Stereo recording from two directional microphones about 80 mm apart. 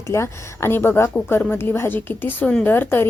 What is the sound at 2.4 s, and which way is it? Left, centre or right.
Speech, centre.